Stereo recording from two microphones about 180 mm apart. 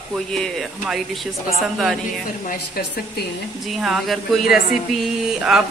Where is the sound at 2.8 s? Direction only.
55° left (ahead or behind).